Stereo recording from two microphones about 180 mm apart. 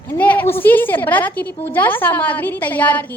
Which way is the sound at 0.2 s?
10° left (ahead or behind).